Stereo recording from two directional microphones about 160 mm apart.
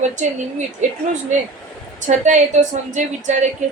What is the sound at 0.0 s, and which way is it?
Speech, 50° right (ahead or behind).